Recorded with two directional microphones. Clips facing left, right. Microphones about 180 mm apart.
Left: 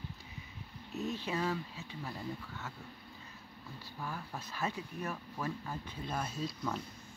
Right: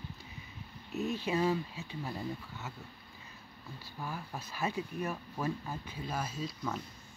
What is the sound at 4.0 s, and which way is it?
Speech, 10° right (ahead or behind).